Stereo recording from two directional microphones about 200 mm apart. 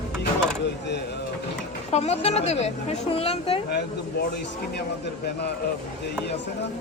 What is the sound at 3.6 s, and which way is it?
Speech, 55° left (ahead or behind).